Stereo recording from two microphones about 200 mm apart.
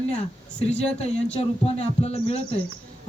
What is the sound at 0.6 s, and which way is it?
Speech, 30° left (ahead or behind).